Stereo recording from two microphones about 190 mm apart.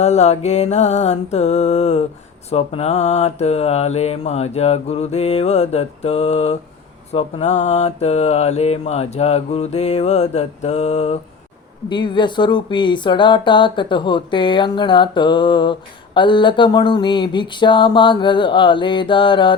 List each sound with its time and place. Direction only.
0.0 s mantra: 35° left (ahead or behind)
11.9 s speech: 25° left (ahead or behind)